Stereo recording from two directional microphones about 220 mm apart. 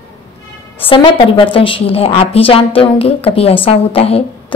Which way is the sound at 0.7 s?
25° left (ahead or behind).